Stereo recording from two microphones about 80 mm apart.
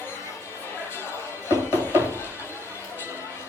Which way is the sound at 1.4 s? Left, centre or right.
Left.